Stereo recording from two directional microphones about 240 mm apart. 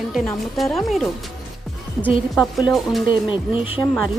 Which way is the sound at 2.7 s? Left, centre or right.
Centre.